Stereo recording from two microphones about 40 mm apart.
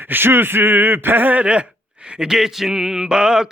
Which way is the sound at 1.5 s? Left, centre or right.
Right.